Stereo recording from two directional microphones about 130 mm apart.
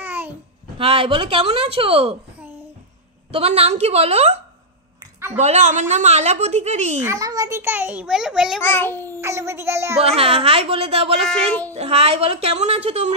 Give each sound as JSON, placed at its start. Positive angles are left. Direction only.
{"t": 0.0, "sound": "babbling", "side_deg": -15}
{"t": 0.7, "sound": "a woman's voice", "side_deg": -45}
{"t": 3.3, "sound": "a woman's voice", "side_deg": -50}
{"t": 7.0, "sound": "a child's voice", "side_deg": -25}
{"t": 8.6, "sound": "babbling", "side_deg": 15}
{"t": 9.2, "sound": "a sound", "side_deg": -20}
{"t": 9.9, "sound": "a woman's voice", "side_deg": -50}
{"t": 11.2, "sound": "babbling", "side_deg": 10}
{"t": 11.7, "sound": "a woman's voice", "side_deg": -50}